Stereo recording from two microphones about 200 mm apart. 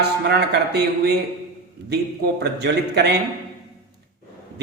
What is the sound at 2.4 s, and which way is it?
Speech, 55° right (ahead or behind).